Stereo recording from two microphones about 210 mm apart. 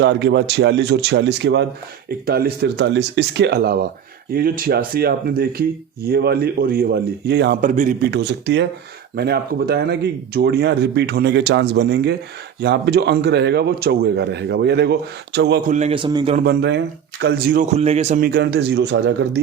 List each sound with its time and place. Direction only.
0.0 s speech: 55° right (ahead or behind)
7.6 s a man's voice: 40° right (ahead or behind)
8.1 s speech: 55° right (ahead or behind)
15.6 s a man's voice: 35° right (ahead or behind)
16.3 s speech: 50° right (ahead or behind)
17.7 s a man's voice: 30° right (ahead or behind)
18.2 s speech: 45° right (ahead or behind)